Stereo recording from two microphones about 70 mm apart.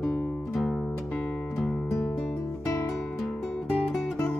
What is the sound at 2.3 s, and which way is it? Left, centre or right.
Music, left.